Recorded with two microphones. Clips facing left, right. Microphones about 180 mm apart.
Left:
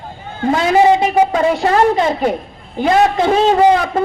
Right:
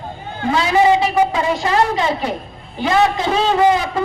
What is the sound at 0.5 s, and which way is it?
A man's voice, 50° left (ahead or behind).